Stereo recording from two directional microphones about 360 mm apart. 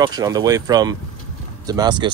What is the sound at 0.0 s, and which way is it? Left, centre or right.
Speech, centre.